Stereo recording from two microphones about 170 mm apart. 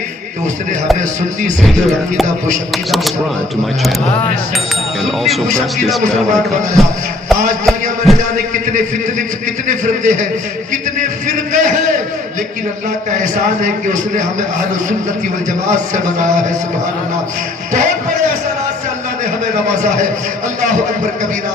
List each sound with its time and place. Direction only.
1.6 s a man's voice: centre (ahead or behind)
5.0 s a man's voice: centre (ahead or behind)
8.1 s a man's voice: centre (ahead or behind)
9.6 s a man's voice: 45° right (ahead or behind)
11.3 s a man's voice: 45° right (ahead or behind)
13.6 s a man's voice: 50° right (ahead or behind)
17.7 s a sound: 45° right (ahead or behind)